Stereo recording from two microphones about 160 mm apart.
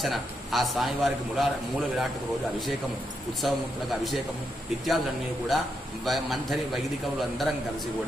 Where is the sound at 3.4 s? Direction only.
Centre (ahead or behind).